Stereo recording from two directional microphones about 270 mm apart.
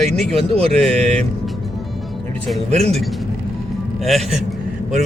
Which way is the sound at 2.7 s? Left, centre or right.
Right.